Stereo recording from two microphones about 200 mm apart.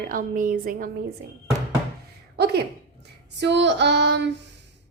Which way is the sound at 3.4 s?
60° right (ahead or behind).